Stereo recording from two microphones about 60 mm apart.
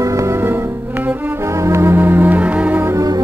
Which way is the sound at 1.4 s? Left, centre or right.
Right.